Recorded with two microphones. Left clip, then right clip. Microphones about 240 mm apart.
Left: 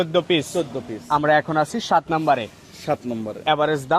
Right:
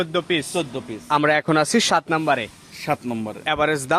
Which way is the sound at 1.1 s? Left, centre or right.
Right.